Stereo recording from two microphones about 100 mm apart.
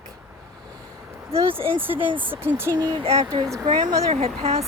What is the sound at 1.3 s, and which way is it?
Speech, 75° right (ahead or behind).